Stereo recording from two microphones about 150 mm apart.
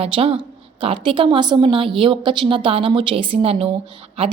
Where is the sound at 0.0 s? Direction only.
40° right (ahead or behind).